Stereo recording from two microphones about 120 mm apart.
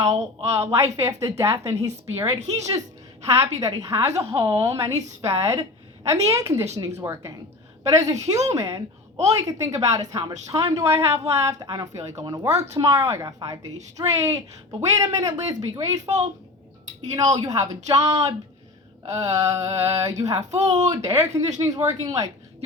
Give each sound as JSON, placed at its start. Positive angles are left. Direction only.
{"t": 0.0, "sound": "a woman's voice", "side_deg": -30}
{"t": 17.3, "sound": "speech", "side_deg": -30}